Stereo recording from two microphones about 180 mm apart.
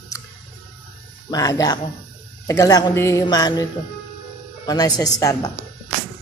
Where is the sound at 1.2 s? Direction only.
20° left (ahead or behind).